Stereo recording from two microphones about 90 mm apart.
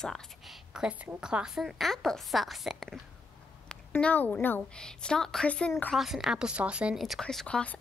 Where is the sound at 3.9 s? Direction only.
20° left (ahead or behind).